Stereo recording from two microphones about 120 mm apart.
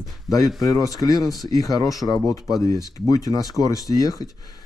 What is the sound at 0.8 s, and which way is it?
Speech, 30° left (ahead or behind).